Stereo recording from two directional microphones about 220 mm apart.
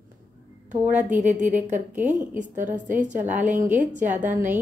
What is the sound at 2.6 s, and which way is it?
Speech, 35° right (ahead or behind).